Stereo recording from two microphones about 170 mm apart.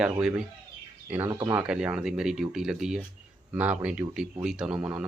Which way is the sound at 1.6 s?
5° right (ahead or behind).